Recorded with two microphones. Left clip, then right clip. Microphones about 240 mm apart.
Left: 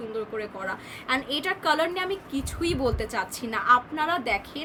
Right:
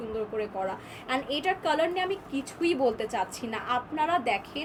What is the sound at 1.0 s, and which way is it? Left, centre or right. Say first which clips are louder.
A woman's voice: left 1 dB; left.